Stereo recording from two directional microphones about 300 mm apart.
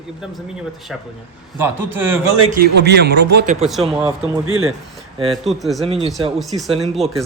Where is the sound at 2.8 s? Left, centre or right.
Right.